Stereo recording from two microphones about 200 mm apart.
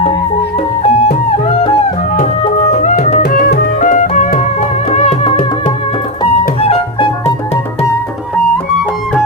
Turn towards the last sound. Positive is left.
turn(degrees=30)  # may be behind; listen again after turning